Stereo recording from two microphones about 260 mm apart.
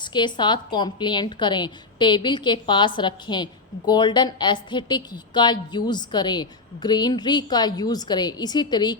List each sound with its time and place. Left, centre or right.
0.0 s a woman's voice: centre